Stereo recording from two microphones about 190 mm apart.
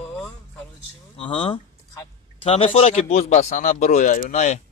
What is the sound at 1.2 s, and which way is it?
Speech, 30° left (ahead or behind).